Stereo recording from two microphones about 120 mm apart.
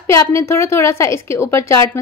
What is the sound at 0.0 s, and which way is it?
A woman's voice, 20° left (ahead or behind).